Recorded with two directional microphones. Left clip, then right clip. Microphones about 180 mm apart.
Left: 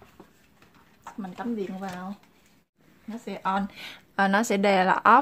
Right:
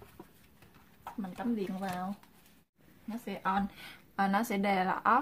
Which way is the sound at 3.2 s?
25° left (ahead or behind).